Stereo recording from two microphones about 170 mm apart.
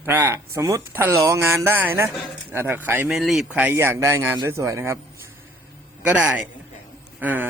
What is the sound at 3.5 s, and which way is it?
Speech, 10° right (ahead or behind).